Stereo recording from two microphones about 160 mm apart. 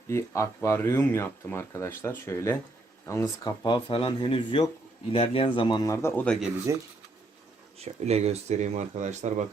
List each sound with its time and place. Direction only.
0.1 s speech: 20° left (ahead or behind)
7.8 s speech: 40° right (ahead or behind)